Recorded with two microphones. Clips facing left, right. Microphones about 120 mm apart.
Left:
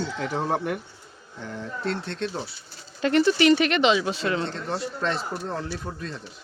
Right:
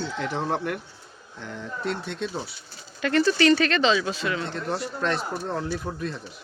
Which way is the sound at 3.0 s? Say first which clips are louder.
Left 1 dB; 20° left (ahead or behind).